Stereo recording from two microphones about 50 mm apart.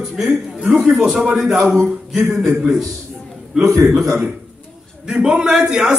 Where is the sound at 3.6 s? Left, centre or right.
Right.